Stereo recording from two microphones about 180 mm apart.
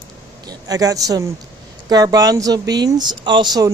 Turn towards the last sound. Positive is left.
turn(degrees=-20)  # may be behind; listen again after turning